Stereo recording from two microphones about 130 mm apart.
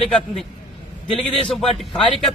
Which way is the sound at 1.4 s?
5° left (ahead or behind).